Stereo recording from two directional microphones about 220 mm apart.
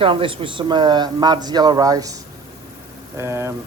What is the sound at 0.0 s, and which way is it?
Speech, 25° right (ahead or behind).